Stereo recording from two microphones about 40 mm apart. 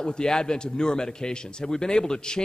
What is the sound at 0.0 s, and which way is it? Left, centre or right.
A man's voice, centre.